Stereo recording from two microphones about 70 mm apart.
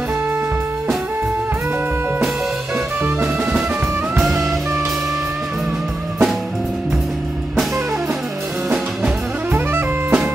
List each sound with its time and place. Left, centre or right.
4.2 s music: centre
9.5 s music: right